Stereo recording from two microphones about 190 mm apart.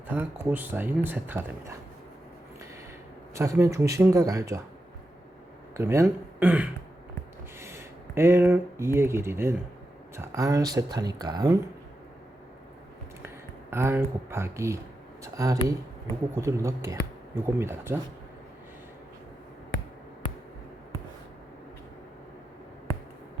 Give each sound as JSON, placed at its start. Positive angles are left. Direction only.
{"t": 0.1, "sound": "speech", "side_deg": -10}
{"t": 3.3, "sound": "speech", "side_deg": -15}
{"t": 5.7, "sound": "speech", "side_deg": -15}
{"t": 13.2, "sound": "speech", "side_deg": -15}